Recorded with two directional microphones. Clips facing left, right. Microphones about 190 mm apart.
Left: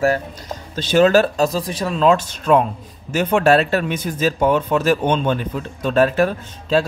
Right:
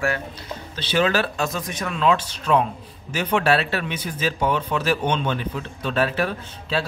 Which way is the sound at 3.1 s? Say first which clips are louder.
Left 6 dB; 45° left (ahead or behind).